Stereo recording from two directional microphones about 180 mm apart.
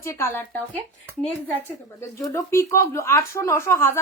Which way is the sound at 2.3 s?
15° left (ahead or behind).